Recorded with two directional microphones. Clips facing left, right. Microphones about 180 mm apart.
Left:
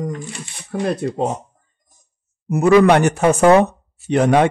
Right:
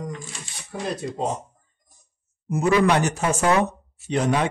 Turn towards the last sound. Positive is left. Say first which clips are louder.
# left 8 dB
turn(degrees=60)  # may be behind; listen again after turning